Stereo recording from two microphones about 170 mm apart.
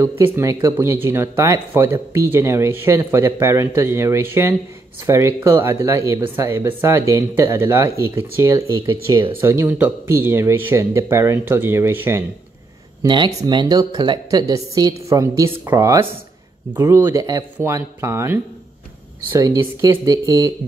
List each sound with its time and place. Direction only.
0.0 s speech: 15° right (ahead or behind)
13.0 s speech: 25° right (ahead or behind)